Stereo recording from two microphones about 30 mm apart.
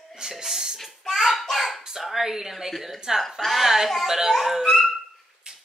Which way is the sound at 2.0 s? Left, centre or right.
Centre.